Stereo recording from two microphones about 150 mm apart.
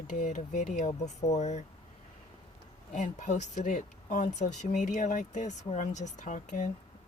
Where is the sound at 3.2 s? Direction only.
55° left (ahead or behind).